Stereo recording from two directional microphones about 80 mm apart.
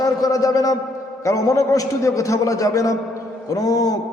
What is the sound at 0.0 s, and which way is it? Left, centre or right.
A man's voice, left.